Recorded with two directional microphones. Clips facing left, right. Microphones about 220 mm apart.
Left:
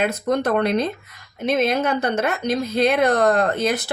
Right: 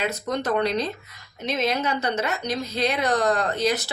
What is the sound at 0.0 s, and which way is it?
Speech, 55° left (ahead or behind).